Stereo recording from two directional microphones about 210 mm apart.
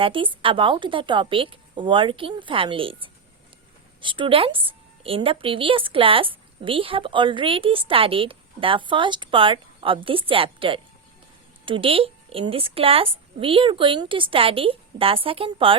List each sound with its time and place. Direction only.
0.0 s a woman's voice: 25° right (ahead or behind)